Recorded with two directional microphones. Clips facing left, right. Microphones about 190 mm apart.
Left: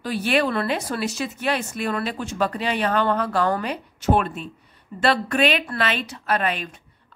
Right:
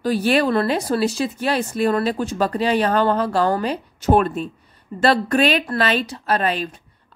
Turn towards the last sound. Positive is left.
turn(degrees=-35)  # may be behind; listen again after turning